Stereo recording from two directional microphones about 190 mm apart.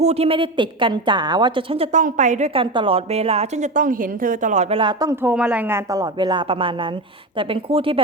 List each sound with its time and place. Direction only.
0.0 s a woman's voice: 35° right (ahead or behind)
2.6 s a woman's voice: 30° right (ahead or behind)
5.3 s a woman's voice: 5° right (ahead or behind); by 8.0 s 30° right (ahead or behind)